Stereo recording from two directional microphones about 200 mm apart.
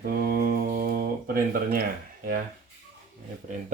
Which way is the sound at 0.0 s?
50° right (ahead or behind).